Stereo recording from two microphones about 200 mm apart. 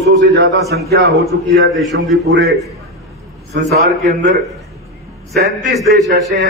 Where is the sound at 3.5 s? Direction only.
40° right (ahead or behind).